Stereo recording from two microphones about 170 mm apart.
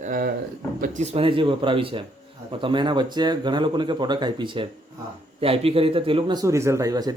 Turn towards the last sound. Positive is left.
turn(degrees=-20)  # may be behind; listen again after turning